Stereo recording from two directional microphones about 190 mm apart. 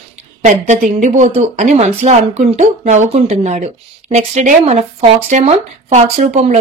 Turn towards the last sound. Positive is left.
turn(degrees=-35)  # may be behind; listen again after turning